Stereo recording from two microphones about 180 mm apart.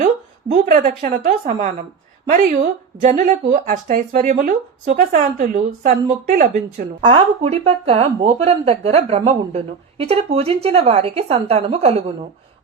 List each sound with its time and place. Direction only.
0.0 s a woman's voice: 45° right (ahead or behind)
7.0 s speech: 30° right (ahead or behind)